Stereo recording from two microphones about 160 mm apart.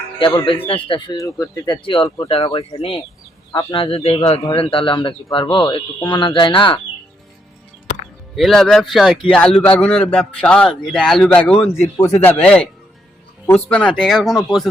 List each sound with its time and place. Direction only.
0.3 s speech: 35° left (ahead or behind)
2.3 s speech: 35° left (ahead or behind)
8.4 s a man's voice: centre (ahead or behind)
11.6 s a man's voice: 20° left (ahead or behind)
12.4 s a man's voice: 5° left (ahead or behind)